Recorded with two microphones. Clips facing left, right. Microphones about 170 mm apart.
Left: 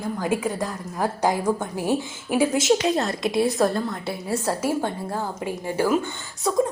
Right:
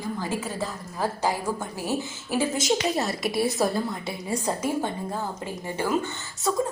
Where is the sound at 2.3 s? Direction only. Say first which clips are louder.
Left 5 dB; 10° left (ahead or behind).